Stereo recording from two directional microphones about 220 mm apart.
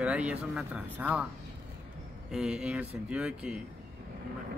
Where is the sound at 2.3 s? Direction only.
5° right (ahead or behind).